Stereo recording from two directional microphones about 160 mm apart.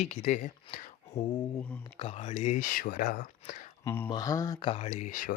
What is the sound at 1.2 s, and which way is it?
Mantra, 30° left (ahead or behind).